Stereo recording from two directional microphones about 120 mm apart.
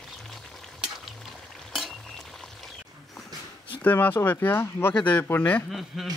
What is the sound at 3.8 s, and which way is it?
Speech, 15° left (ahead or behind).